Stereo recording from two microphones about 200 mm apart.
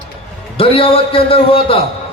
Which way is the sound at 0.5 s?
25° left (ahead or behind).